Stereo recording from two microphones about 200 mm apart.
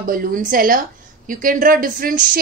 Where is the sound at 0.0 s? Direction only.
45° right (ahead or behind).